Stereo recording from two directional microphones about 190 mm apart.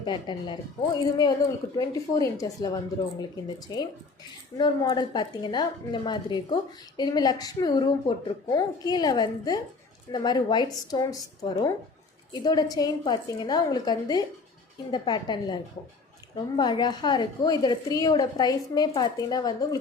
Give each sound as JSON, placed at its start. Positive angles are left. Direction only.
{"t": 0.0, "sound": "a woman's voice", "side_deg": 25}
{"t": 1.7, "sound": "a woman's voice", "side_deg": 20}